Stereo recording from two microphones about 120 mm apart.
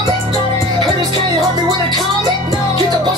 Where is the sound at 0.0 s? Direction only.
35° right (ahead or behind).